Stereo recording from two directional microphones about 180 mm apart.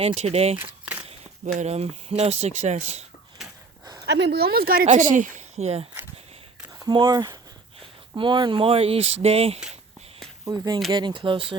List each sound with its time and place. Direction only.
0.0 s speech: 35° right (ahead or behind)
4.0 s speech: 70° right (ahead or behind); by 5.9 s 35° right (ahead or behind)
6.8 s speech: 25° right (ahead or behind)
10.4 s speech: 20° right (ahead or behind)